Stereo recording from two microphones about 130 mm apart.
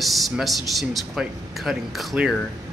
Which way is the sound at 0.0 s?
Centre (ahead or behind).